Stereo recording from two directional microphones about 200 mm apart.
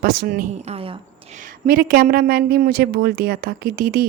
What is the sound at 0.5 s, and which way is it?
A woman's voice, 35° right (ahead or behind).